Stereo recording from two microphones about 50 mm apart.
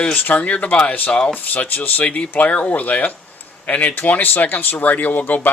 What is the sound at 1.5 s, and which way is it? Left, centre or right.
Speech, left.